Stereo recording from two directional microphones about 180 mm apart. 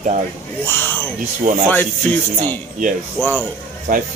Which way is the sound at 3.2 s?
10° left (ahead or behind).